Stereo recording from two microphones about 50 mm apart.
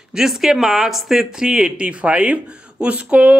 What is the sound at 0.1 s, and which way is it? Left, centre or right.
Speech, centre.